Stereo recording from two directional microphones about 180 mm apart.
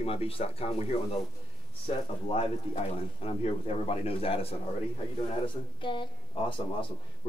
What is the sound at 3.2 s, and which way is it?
Speech, 35° left (ahead or behind).